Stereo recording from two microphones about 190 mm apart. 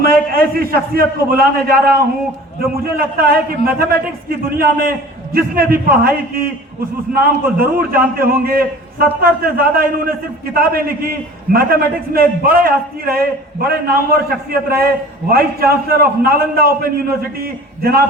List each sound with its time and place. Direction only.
0.0 s a man's voice: 50° right (ahead or behind)